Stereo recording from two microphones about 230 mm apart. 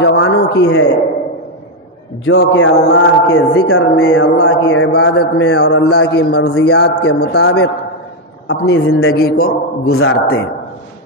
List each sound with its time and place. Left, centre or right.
0.0 s a sound: left
0.6 s a man's voice: left
2.2 s a man's voice: left
9.1 s a man's voice: left
9.8 s a man's voice: left